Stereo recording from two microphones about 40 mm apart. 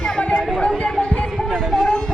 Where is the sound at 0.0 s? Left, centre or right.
Left.